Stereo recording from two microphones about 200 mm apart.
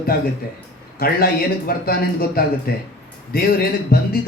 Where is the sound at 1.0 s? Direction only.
50° left (ahead or behind).